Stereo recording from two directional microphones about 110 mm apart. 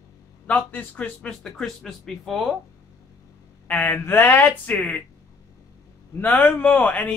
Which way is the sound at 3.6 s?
15° left (ahead or behind).